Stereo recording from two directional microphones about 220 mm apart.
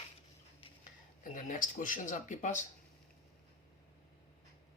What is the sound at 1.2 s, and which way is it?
Speech, 35° left (ahead or behind).